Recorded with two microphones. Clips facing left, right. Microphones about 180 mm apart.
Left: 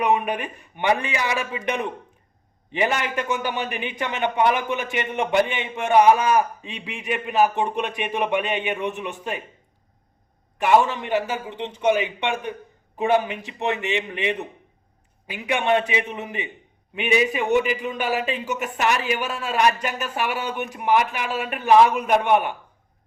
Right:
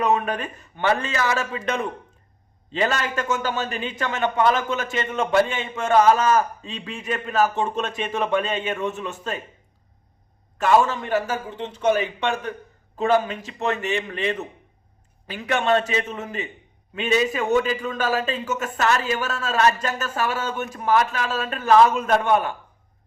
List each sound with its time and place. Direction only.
0.0 s a man's voice: 15° left (ahead or behind)
10.6 s a man's voice: 20° left (ahead or behind)